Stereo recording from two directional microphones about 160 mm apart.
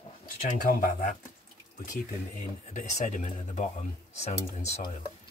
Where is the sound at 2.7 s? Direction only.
50° left (ahead or behind).